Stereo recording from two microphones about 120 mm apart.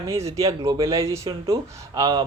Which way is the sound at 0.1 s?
25° right (ahead or behind).